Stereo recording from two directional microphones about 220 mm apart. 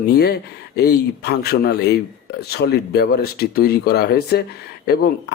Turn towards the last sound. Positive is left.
turn(degrees=50)  # may be behind; listen again after turning